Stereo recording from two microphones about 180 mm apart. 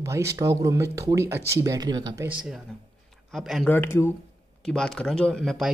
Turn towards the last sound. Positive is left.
turn(degrees=0)  # may be behind; listen again after turning